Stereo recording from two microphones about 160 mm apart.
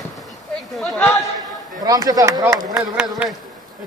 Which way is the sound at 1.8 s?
20° right (ahead or behind).